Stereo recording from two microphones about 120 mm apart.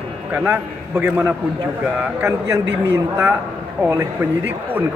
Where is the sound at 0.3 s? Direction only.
15° right (ahead or behind).